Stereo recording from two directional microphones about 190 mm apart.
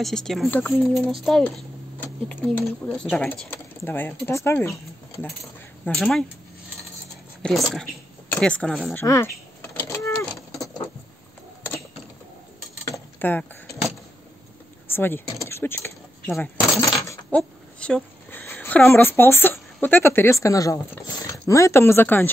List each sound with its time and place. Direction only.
0.0 s speech: centre (ahead or behind)
5.9 s speech: 5° left (ahead or behind)
7.4 s speech: centre (ahead or behind)
9.0 s speech: 15° left (ahead or behind)
9.6 s vehicle: 15° left (ahead or behind)
12.8 s keys jangling: 15° left (ahead or behind)
14.9 s speech: 10° left (ahead or behind)
16.8 s coin: 15° left (ahead or behind)
17.4 s speech: 5° left (ahead or behind)